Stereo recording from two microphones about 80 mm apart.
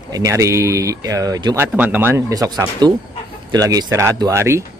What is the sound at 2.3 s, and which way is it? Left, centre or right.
Speech, right.